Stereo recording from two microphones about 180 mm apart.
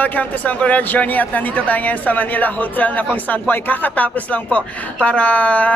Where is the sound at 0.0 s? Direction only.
10° left (ahead or behind).